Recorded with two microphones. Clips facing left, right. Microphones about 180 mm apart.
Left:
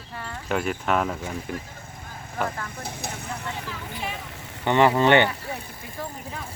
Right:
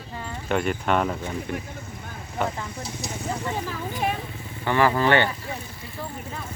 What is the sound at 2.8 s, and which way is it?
Speech, 55° left (ahead or behind).